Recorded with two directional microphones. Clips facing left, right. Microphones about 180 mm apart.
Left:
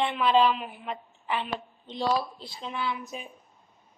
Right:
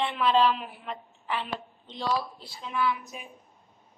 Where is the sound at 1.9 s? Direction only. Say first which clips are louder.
Left 3 dB; 15° left (ahead or behind).